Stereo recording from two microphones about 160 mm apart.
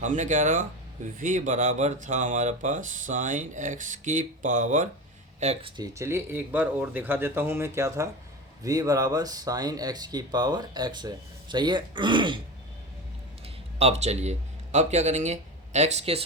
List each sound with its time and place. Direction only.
0.0 s speech: 50° right (ahead or behind)
5.7 s speech: 20° right (ahead or behind)
13.7 s speech: 40° right (ahead or behind)